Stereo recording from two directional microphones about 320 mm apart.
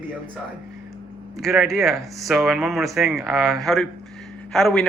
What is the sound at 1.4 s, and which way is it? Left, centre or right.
Speech, centre.